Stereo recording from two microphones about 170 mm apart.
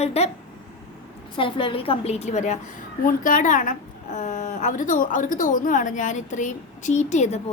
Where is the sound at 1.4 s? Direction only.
30° left (ahead or behind).